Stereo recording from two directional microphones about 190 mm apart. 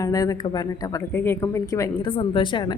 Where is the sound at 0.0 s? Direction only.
20° left (ahead or behind).